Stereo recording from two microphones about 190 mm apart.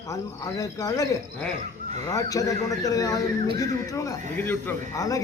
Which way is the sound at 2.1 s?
20° left (ahead or behind).